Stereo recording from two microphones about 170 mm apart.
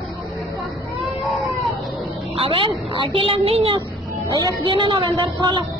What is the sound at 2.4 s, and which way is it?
A woman's voice, 30° right (ahead or behind).